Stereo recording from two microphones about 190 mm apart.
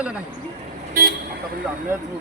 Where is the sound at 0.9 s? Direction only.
55° right (ahead or behind).